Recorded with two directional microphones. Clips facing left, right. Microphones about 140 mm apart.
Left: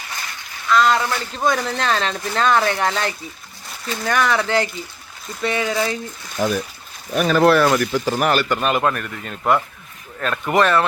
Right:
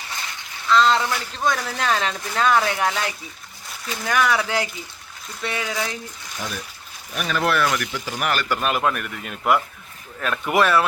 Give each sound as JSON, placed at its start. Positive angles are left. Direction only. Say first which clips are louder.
{"t": 0.1, "sound": "a sound", "louder": "left 1 dB", "side_deg": -20}
{"t": 1.0, "sound": "a man's voice", "louder": "left 3 dB", "side_deg": -10}
{"t": 6.4, "sound": "speech", "louder": "left 12 dB", "side_deg": 45}
{"t": 7.9, "sound": "speech", "louder": "left 8 dB", "side_deg": 40}
{"t": 8.4, "sound": "a man's voice", "louder": "left 3 dB", "side_deg": -5}